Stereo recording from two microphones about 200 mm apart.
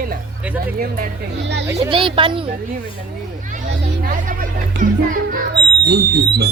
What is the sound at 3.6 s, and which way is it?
Speech, 60° right (ahead or behind).